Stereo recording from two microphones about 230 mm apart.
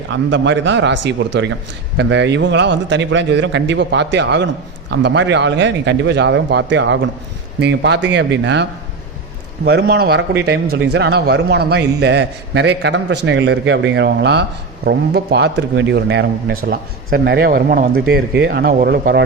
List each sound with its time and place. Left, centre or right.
0.1 s speech: right
9.6 s speech: right